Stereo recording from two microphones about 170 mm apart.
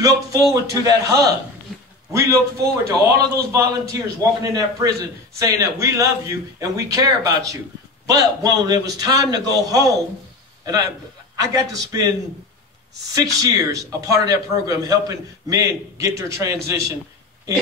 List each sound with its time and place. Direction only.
0.0 s a man's voice: 20° right (ahead or behind)
13.1 s a man's voice: 20° right (ahead or behind)